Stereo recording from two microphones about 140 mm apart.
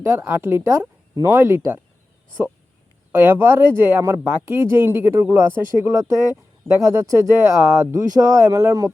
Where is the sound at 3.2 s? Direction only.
15° right (ahead or behind).